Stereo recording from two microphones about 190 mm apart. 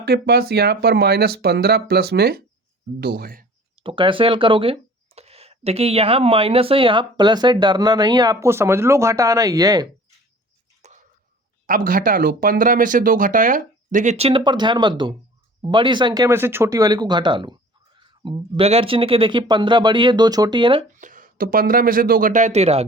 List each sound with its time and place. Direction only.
0.0 s speech: 55° right (ahead or behind)
3.8 s speech: 25° right (ahead or behind)
10.8 s a sound: 35° right (ahead or behind)
11.6 s speech: 50° right (ahead or behind); by 20.8 s 25° right (ahead or behind)
21.0 s speech: 45° right (ahead or behind)